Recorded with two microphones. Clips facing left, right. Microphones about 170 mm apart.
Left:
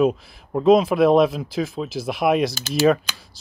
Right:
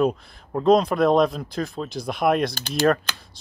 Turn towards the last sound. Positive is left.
turn(degrees=5)  # may be behind; listen again after turning